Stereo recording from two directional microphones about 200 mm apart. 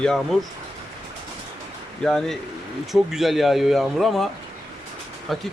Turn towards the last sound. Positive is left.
turn(degrees=0)  # may be behind; listen again after turning